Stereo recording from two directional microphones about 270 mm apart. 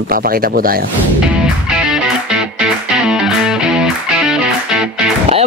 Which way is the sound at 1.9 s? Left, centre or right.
Centre.